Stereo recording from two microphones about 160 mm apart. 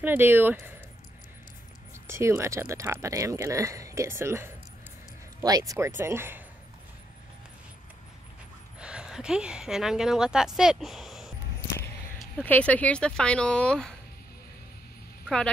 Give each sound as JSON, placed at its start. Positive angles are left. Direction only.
{"t": 0.0, "sound": "speech", "side_deg": -10}
{"t": 2.0, "sound": "speech", "side_deg": -15}
{"t": 8.7, "sound": "speech", "side_deg": -5}
{"t": 15.2, "sound": "speech", "side_deg": 5}